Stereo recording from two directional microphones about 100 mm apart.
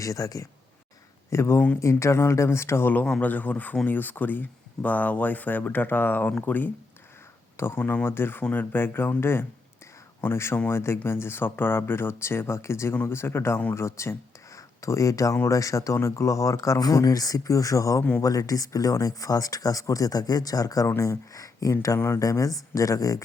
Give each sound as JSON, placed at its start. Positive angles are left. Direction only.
{"t": 0.0, "sound": "speech", "side_deg": 35}
{"t": 7.8, "sound": "speech", "side_deg": 15}
{"t": 21.9, "sound": "speech", "side_deg": 25}
{"t": 22.2, "sound": "speech", "side_deg": 35}